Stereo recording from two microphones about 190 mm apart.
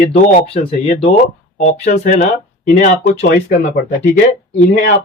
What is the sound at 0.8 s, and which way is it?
Speech, 30° left (ahead or behind).